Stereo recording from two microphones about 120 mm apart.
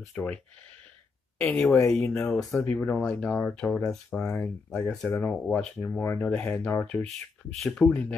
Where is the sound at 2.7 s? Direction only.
10° left (ahead or behind).